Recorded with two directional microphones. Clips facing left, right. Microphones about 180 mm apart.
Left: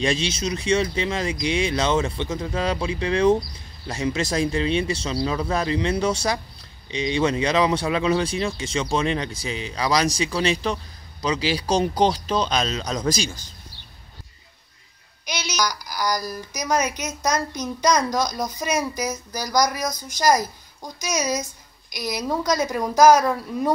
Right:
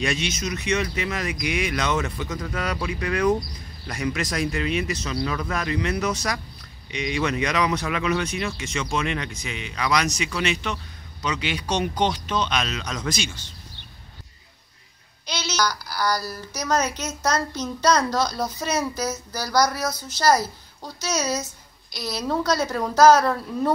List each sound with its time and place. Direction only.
0.0 s speech: 30° left (ahead or behind)
15.2 s a woman's voice: 15° left (ahead or behind)